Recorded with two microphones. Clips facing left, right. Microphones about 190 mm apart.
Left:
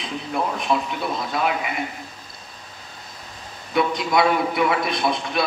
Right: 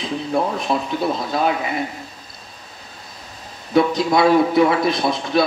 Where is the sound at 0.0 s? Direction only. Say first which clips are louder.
Right 5 dB; 35° right (ahead or behind).